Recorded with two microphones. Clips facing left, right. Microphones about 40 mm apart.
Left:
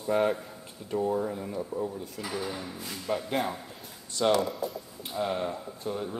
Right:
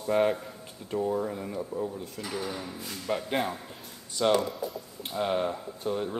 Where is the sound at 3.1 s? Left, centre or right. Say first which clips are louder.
Even; centre.